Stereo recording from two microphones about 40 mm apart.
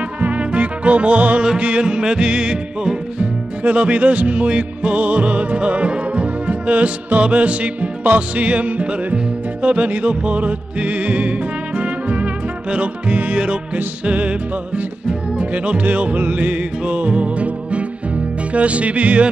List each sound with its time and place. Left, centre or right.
0.2 s music: right
3.6 s music: right
15.5 s music: right